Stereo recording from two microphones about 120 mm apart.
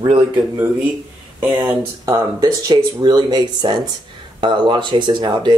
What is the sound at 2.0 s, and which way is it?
Speech, 30° right (ahead or behind).